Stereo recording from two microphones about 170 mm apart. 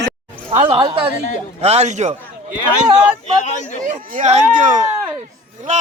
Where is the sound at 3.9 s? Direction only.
45° right (ahead or behind).